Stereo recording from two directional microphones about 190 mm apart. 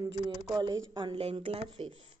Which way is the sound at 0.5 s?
20° right (ahead or behind).